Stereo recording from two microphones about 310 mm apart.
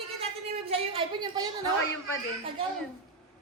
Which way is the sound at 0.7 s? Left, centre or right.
Centre.